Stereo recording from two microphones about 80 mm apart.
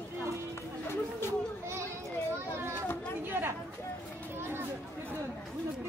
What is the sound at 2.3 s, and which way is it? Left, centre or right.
A child's voice, right.